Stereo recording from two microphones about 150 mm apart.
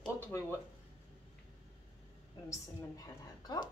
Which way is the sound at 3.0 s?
30° left (ahead or behind).